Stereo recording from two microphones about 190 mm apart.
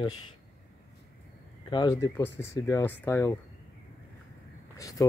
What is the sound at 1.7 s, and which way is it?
Speech, 20° left (ahead or behind).